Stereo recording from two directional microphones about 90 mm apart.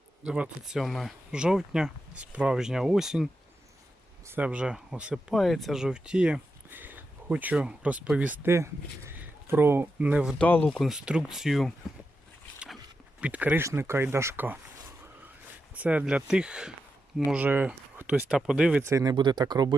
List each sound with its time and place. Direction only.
0.3 s speech: 10° right (ahead or behind)
4.4 s speech: 15° right (ahead or behind)
5.3 s speech: centre (ahead or behind)
6.7 s speech: 20° right (ahead or behind)
8.4 s speech: 30° right (ahead or behind); by 10.3 s 15° right (ahead or behind)
10.3 s speech: 15° left (ahead or behind)
10.8 s speech: 5° right (ahead or behind)
12.5 s a sound: centre (ahead or behind)
13.2 s speech: 15° right (ahead or behind)
13.6 s speech: 30° right (ahead or behind)
15.7 s speech: 15° right (ahead or behind)
18.3 s speech: 5° right (ahead or behind)
18.8 s speech: 35° right (ahead or behind)
19.1 s speech: 55° right (ahead or behind)